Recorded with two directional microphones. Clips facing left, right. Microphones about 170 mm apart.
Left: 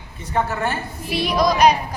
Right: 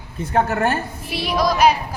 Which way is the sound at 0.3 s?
50° right (ahead or behind).